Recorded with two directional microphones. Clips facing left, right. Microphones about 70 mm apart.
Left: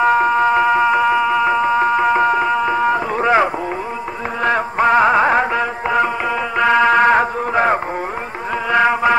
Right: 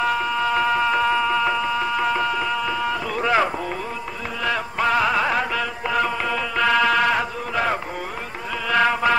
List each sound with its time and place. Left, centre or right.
0.0 s music: left
8.7 s music: left